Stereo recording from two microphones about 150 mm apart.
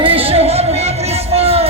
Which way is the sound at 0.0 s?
40° right (ahead or behind).